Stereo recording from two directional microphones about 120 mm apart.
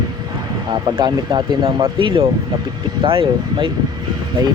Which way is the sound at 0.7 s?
40° right (ahead or behind).